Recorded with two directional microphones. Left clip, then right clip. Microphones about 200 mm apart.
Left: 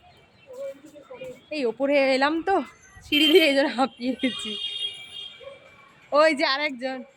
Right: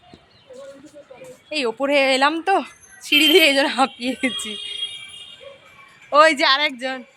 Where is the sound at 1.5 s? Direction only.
Centre (ahead or behind).